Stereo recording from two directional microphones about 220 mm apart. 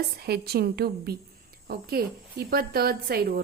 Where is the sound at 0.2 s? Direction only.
45° right (ahead or behind).